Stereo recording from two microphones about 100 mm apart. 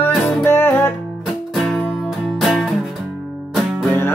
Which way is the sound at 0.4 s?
25° left (ahead or behind).